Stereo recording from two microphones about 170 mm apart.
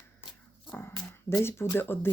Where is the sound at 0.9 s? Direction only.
15° left (ahead or behind).